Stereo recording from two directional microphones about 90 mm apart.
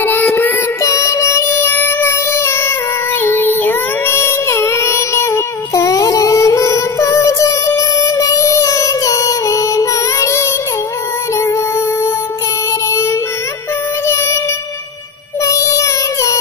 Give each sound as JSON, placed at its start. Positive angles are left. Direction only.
{"t": 0.2, "sound": "music", "side_deg": 30}
{"t": 3.3, "sound": "child singing", "side_deg": 25}
{"t": 15.4, "sound": "child singing", "side_deg": 35}